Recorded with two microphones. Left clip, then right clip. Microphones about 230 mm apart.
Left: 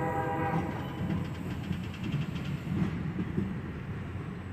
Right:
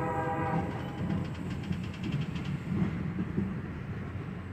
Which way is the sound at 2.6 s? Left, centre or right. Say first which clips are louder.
Even; left.